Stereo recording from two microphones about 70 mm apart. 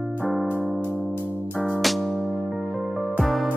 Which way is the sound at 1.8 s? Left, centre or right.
Centre.